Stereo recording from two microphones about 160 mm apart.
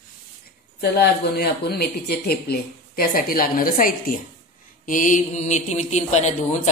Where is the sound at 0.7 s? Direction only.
80° left.